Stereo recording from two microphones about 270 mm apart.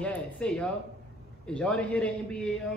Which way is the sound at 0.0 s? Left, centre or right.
Centre.